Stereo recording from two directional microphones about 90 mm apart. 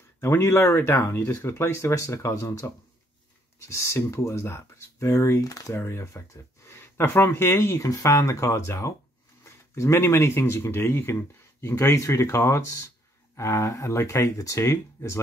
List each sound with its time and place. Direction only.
0.2 s speech: 30° left (ahead or behind)
5.8 s speech: 30° left (ahead or behind)